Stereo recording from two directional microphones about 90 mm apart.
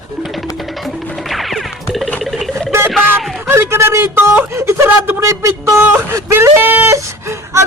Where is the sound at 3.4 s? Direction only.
30° right (ahead or behind).